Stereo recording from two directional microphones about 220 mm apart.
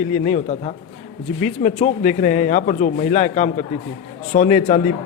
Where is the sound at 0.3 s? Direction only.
30° left (ahead or behind).